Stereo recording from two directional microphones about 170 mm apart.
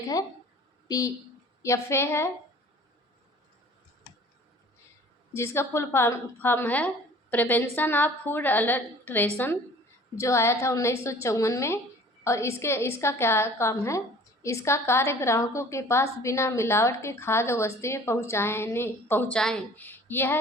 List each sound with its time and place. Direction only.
0.9 s a woman's voice: 20° left (ahead or behind)
5.3 s a woman's voice: 15° left (ahead or behind)